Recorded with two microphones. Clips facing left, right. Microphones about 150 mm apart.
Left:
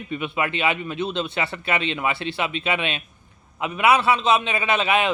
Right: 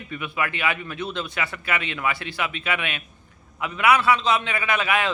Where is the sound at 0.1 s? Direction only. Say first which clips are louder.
Left 3 dB; 25° left (ahead or behind).